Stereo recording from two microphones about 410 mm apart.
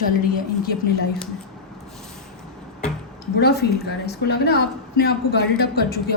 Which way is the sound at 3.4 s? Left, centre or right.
Left.